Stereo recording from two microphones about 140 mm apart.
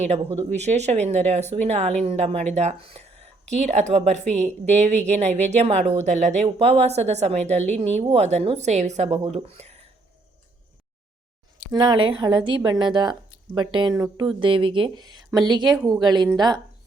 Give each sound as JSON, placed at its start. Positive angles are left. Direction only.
{"t": 0.0, "sound": "speech", "side_deg": -50}
{"t": 4.3, "sound": "speech", "side_deg": 10}
{"t": 5.5, "sound": "speech", "side_deg": -45}
{"t": 6.0, "sound": "speech", "side_deg": -55}
{"t": 11.7, "sound": "a woman's voice", "side_deg": -35}